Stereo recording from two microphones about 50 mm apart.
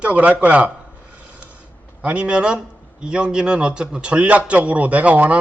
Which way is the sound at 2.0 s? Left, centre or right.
Right.